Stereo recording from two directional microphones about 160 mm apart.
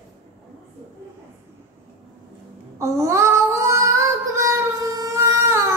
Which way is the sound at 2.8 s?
15° right (ahead or behind).